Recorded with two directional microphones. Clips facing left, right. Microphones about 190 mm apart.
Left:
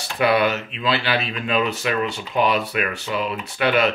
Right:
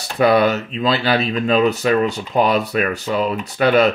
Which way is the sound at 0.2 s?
40° right (ahead or behind).